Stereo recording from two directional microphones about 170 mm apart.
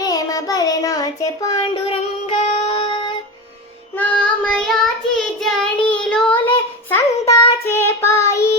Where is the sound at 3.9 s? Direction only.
10° left (ahead or behind).